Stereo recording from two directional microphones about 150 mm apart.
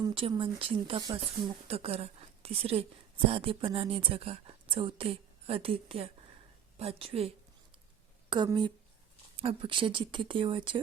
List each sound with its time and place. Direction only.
0.0 s a woman's voice: 35° right (ahead or behind)